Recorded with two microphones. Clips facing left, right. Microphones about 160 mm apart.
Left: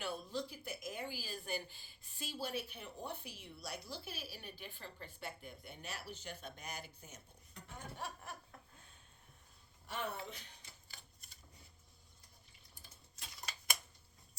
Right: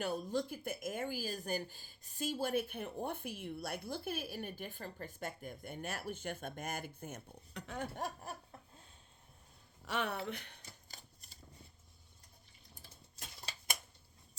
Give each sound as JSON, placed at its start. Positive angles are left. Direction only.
{"t": 0.0, "sound": "a woman's voice", "side_deg": -45}
{"t": 7.9, "sound": "snicker", "side_deg": -40}
{"t": 9.8, "sound": "speech", "side_deg": -75}